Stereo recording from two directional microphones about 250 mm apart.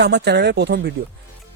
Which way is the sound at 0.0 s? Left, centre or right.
Right.